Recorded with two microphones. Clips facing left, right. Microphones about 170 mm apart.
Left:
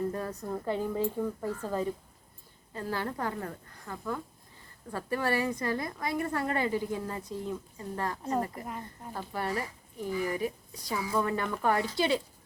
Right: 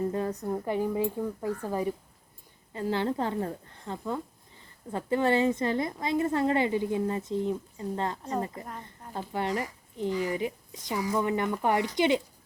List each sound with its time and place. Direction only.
0.1 s a woman's voice: 20° right (ahead or behind)